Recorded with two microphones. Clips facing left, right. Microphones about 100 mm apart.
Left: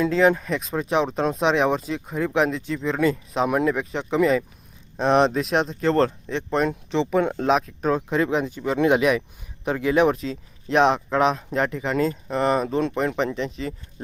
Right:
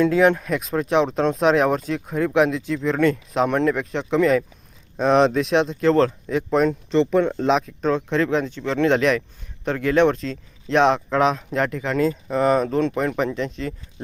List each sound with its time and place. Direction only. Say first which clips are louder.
0.0 s speech: right 2 dB; centre (ahead or behind)